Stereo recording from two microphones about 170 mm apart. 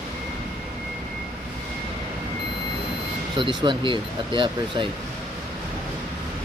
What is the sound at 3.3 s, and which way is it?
Speech, 30° right (ahead or behind).